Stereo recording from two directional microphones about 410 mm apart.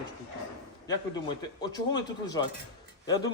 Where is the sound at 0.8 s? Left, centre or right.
Centre.